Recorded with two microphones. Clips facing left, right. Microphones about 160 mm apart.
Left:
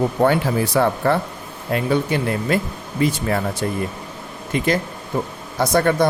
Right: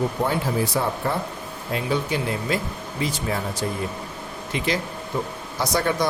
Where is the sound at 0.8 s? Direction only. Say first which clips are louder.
Left 7 dB; 70° left (ahead or behind).